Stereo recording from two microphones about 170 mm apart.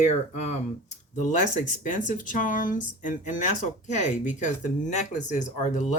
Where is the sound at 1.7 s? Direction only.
50° left (ahead or behind).